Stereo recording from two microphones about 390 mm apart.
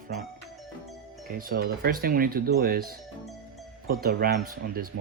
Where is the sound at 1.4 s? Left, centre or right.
Right.